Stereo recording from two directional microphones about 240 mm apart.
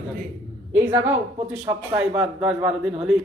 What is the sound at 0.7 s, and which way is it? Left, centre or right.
A woman's voice, centre.